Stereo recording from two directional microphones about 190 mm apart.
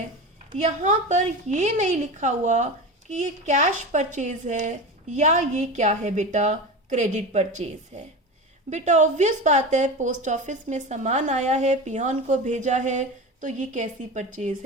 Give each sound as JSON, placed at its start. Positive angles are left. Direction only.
{"t": 0.5, "sound": "a woman's voice", "side_deg": -40}